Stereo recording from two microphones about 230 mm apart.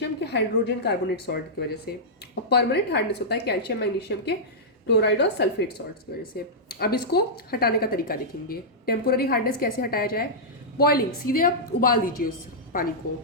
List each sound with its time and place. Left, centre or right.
0.2 s a woman's voice: left